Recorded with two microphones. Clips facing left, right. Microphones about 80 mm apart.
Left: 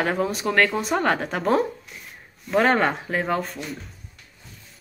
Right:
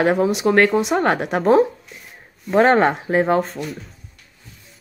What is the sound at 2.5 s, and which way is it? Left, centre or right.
Speech, right.